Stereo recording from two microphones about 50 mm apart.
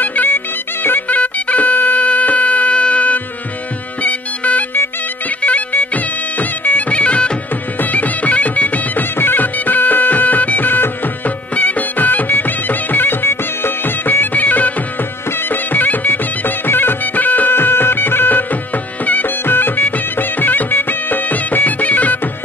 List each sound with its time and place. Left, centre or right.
0.0 s music: left
6.9 s music: left
15.7 s music: left